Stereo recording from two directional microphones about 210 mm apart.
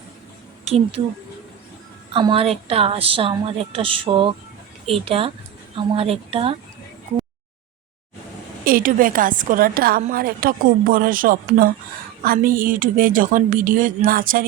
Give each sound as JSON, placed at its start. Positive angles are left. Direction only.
{"t": 0.6, "sound": "speech", "side_deg": -30}
{"t": 2.1, "sound": "a woman's voice", "side_deg": -25}
{"t": 8.6, "sound": "a woman's voice", "side_deg": -40}